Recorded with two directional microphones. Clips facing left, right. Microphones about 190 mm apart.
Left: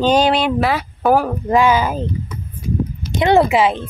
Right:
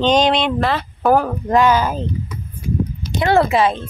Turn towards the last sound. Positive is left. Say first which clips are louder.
# left 2 dB
turn(degrees=15)  # may be behind; listen again after turning